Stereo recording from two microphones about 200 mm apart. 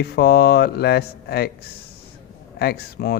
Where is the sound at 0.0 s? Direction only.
50° left (ahead or behind).